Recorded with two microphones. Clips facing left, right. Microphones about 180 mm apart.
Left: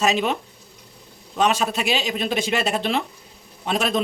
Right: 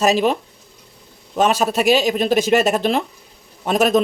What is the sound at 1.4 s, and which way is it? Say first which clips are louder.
A man's voice: right 4 dB; 40° right (ahead or behind).